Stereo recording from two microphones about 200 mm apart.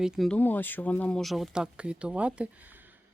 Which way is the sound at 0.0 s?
Centre (ahead or behind).